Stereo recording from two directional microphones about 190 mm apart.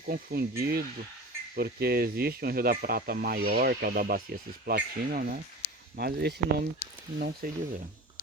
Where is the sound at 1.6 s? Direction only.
55° right (ahead or behind).